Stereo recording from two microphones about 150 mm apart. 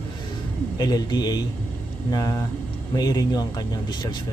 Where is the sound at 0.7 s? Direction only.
25° left (ahead or behind).